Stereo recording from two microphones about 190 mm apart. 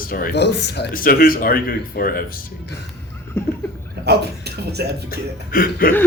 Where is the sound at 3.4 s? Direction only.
10° left (ahead or behind).